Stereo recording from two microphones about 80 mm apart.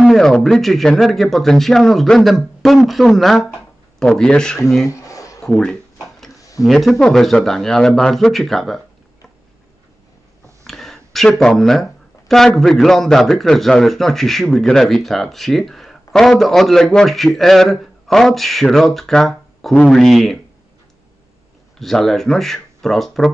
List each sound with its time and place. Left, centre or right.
0.0 s speech: centre
4.8 s a sound: left
5.4 s a sound: centre
6.6 s speech: centre
10.6 s speech: centre
21.7 s speech: centre